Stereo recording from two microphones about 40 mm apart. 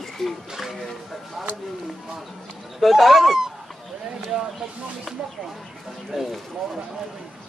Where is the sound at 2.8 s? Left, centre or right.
Centre.